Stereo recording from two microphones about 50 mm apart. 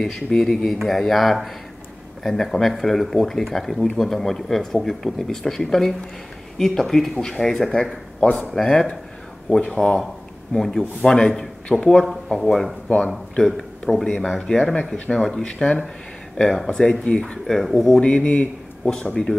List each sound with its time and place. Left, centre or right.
0.0 s a man's voice: centre
17.0 s speech: centre
18.0 s speech: left
18.9 s speech: centre